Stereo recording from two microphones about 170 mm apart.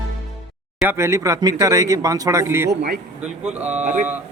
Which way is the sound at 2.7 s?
70° right (ahead or behind).